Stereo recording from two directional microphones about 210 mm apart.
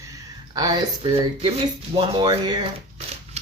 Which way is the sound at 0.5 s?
20° right (ahead or behind).